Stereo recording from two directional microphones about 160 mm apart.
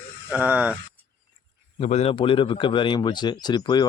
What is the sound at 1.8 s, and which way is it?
A man's voice, 40° left (ahead or behind).